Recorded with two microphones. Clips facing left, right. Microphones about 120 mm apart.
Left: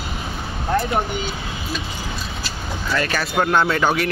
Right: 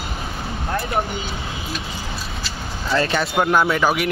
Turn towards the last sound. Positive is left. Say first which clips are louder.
# even
turn(degrees=-10)  # may be behind; listen again after turning